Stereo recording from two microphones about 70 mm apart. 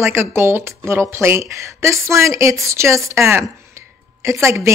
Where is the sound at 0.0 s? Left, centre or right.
Right.